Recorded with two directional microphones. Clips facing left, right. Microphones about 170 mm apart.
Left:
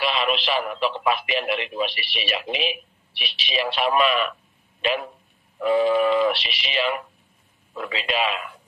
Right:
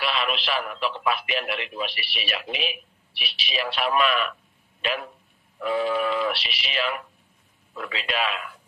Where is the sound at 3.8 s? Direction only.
Centre (ahead or behind).